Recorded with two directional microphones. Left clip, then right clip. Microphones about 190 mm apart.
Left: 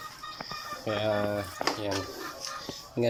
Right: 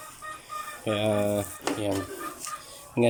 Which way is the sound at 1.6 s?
15° right (ahead or behind).